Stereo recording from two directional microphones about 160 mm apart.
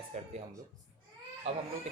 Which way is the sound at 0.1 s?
40° right (ahead or behind).